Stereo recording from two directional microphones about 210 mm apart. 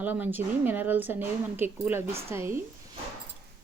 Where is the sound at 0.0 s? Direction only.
10° right (ahead or behind).